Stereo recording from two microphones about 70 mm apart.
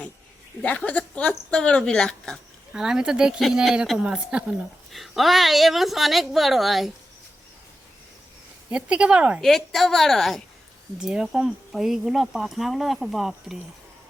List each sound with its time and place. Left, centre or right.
0.6 s speech: centre
2.7 s speech: centre
4.9 s speech: centre
8.7 s speech: centre
9.4 s speech: centre